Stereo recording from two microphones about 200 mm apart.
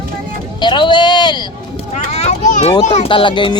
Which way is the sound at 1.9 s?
35° left (ahead or behind).